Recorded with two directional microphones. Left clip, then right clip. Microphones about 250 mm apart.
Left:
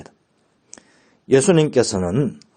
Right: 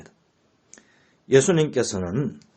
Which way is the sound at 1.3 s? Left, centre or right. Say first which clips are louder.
Left 3 dB; left.